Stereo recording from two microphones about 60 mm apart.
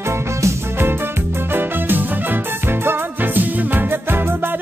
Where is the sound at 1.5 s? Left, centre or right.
Right.